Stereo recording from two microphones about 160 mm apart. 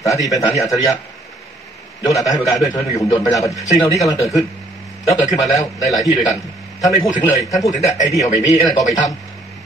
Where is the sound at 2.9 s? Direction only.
20° left (ahead or behind).